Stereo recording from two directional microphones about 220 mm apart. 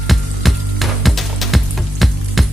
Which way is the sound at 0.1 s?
Centre (ahead or behind).